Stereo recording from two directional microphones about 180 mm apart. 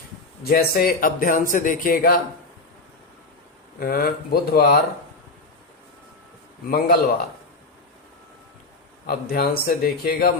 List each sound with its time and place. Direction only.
0.4 s a man's voice: 55° left (ahead or behind)
3.8 s a man's voice: 55° left (ahead or behind)
6.7 s a man's voice: 55° left (ahead or behind)
9.0 s a man's voice: 55° left (ahead or behind)